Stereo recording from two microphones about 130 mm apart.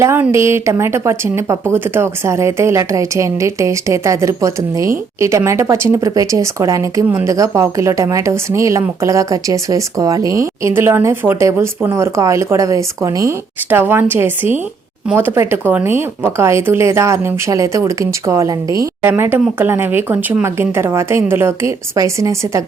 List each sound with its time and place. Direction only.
0.0 s speech: 20° right (ahead or behind)